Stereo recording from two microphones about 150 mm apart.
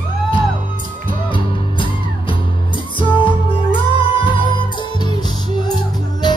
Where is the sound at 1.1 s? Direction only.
35° left (ahead or behind).